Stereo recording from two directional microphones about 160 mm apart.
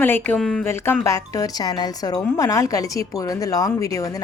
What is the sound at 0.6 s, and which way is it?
Speech, 15° left (ahead or behind).